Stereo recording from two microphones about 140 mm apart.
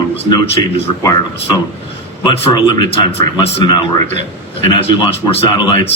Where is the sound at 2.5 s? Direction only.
30° left (ahead or behind).